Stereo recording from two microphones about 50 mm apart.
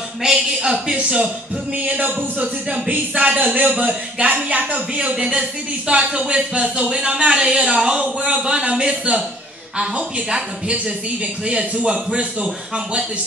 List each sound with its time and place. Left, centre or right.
0.2 s speech: centre
1.8 s speech: right
5.1 s speech: centre